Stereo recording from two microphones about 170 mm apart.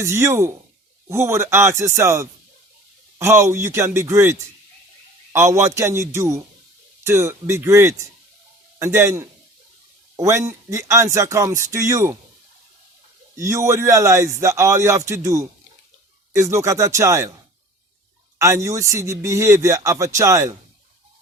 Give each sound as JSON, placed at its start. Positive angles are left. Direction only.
{"t": 0.0, "sound": "speech", "side_deg": -15}
{"t": 13.3, "sound": "speech", "side_deg": -20}
{"t": 18.3, "sound": "a man's voice", "side_deg": -15}